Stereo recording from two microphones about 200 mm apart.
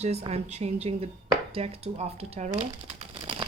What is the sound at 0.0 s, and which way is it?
Speech, 30° right (ahead or behind).